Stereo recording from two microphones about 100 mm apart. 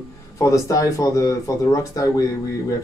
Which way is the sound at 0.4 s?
35° left (ahead or behind).